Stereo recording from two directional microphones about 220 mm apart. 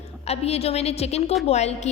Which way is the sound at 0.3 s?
30° left (ahead or behind).